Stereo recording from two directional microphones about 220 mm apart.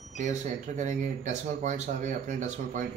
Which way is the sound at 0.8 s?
35° right (ahead or behind).